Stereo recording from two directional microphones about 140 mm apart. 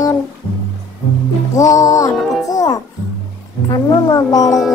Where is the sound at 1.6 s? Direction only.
25° left (ahead or behind).